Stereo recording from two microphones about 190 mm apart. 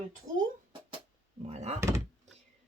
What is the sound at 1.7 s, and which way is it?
Speech, 15° right (ahead or behind).